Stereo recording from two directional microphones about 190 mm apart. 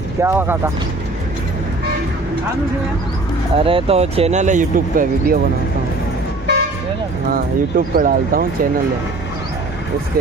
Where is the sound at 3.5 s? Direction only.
30° right (ahead or behind); by 5.4 s 45° right (ahead or behind).